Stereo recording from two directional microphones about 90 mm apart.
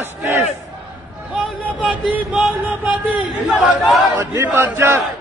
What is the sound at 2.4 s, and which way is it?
A man's voice, 5° right (ahead or behind).